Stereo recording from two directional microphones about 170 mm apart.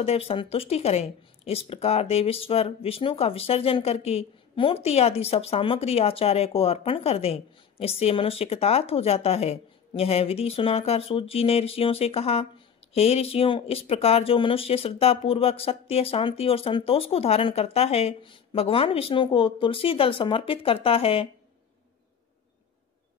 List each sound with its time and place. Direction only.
0.0 s speech: 35° left (ahead or behind)